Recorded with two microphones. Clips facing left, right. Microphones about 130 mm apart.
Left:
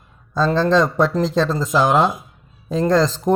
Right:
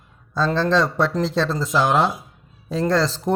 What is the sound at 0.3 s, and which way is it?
Speech, 15° left (ahead or behind).